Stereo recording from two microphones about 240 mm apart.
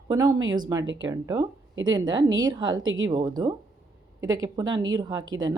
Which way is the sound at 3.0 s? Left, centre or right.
Centre.